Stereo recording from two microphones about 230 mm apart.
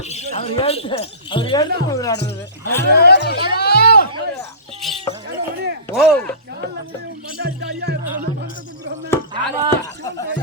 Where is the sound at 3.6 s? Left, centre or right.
Left.